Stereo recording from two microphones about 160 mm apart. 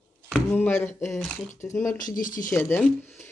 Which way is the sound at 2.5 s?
15° left (ahead or behind).